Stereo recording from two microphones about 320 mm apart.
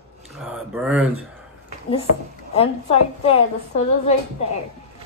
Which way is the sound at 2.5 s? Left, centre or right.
Centre.